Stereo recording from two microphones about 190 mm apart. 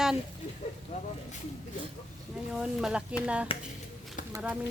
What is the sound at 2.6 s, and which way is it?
A woman's voice, 5° right (ahead or behind).